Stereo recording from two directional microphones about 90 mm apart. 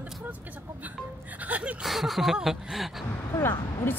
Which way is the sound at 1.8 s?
Centre (ahead or behind).